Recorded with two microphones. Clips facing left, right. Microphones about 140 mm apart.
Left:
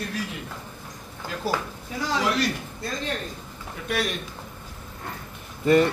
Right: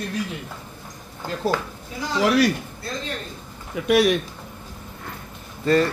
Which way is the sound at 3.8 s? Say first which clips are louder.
Right 10 dB; 80° right.